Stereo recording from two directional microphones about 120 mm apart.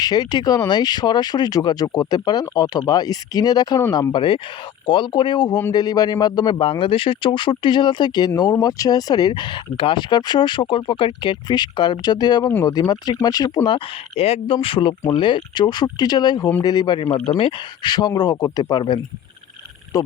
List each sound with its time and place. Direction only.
0.0 s speech: 35° left (ahead or behind)
4.1 s speech: 45° left (ahead or behind)
13.7 s speech: 55° left (ahead or behind); by 17.0 s 35° left (ahead or behind)
17.0 s speech: 50° left (ahead or behind)
17.8 s speech: 35° left (ahead or behind)